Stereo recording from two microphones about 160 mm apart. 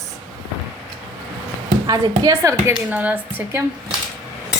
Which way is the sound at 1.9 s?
20° right (ahead or behind).